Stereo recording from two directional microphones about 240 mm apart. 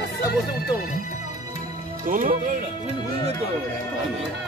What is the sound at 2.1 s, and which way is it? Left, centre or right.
Speech, right.